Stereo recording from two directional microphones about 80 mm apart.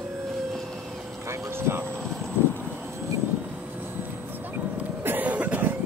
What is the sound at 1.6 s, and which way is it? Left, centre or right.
Speech, right.